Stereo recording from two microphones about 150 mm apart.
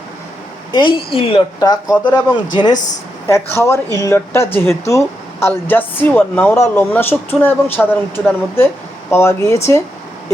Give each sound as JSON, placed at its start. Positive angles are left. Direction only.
{"t": 0.7, "sound": "speech", "side_deg": 30}
{"t": 3.2, "sound": "speech", "side_deg": 15}